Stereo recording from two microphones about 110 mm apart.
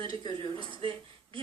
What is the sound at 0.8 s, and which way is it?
Speech, 50° right (ahead or behind).